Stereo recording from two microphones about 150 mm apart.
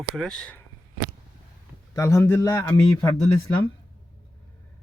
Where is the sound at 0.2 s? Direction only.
5° left (ahead or behind).